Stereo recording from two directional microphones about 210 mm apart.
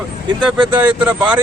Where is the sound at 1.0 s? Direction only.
5° right (ahead or behind).